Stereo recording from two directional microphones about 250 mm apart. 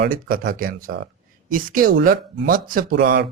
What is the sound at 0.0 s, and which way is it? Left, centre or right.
Speech, right.